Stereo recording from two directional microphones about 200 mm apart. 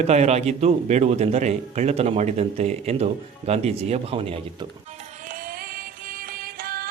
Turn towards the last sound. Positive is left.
turn(degrees=-50)  # may be behind; listen again after turning